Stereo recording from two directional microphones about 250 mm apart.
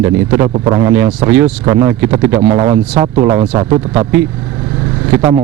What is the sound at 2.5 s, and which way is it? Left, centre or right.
Speech, right.